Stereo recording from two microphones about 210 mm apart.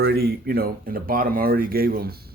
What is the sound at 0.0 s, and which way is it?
Speech, 50° right (ahead or behind).